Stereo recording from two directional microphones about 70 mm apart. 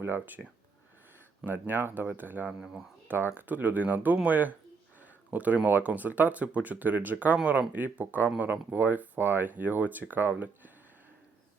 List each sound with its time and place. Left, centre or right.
0.0 s speech: right
1.5 s speech: right
2.5 s speech: centre
3.1 s speech: right